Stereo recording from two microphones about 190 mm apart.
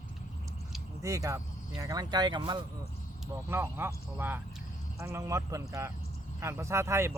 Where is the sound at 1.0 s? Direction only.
15° right (ahead or behind).